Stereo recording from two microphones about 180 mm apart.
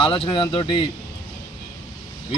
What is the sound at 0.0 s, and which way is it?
Speech, 30° left (ahead or behind).